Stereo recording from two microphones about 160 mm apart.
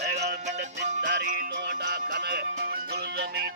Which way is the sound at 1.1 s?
70° right (ahead or behind).